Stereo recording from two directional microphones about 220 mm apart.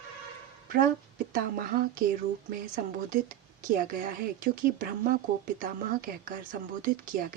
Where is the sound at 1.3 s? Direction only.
40° right (ahead or behind).